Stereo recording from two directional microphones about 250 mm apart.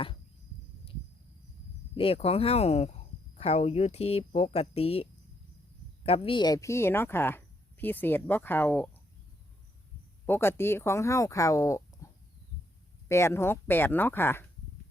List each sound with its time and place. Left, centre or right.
2.0 s speech: left; by 8.9 s centre
10.2 s speech: centre
12.0 s a sound: centre
13.1 s speech: centre